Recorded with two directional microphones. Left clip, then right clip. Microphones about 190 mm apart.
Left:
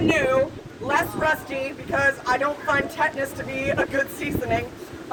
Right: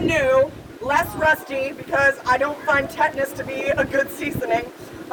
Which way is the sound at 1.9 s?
5° right (ahead or behind).